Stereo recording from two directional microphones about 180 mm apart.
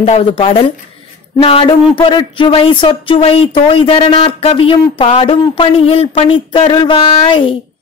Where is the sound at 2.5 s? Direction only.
30° left (ahead or behind).